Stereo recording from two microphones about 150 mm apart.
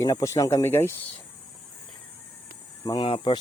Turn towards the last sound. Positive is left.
turn(degrees=35)  # may be behind; listen again after turning